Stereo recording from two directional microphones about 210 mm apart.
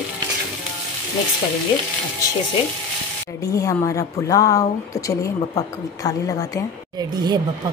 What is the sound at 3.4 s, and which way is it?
A woman's voice, 15° left (ahead or behind).